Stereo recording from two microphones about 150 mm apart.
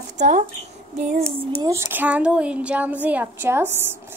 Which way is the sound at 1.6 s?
20° right (ahead or behind).